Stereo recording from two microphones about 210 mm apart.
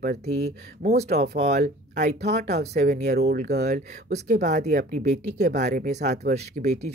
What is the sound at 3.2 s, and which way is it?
Speech, 50° right (ahead or behind).